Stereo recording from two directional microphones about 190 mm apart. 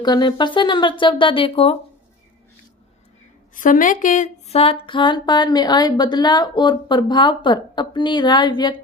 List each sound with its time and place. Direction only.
0.0 s speech: 20° left (ahead or behind)
3.5 s speech: 45° left (ahead or behind); by 8.8 s 20° left (ahead or behind)